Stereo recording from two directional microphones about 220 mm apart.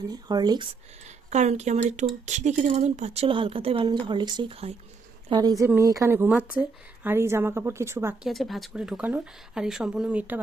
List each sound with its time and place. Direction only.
0.1 s speech: 20° right (ahead or behind)
1.0 s a woman's voice: 30° right (ahead or behind); by 8.3 s 10° right (ahead or behind)
8.3 s speech: centre (ahead or behind)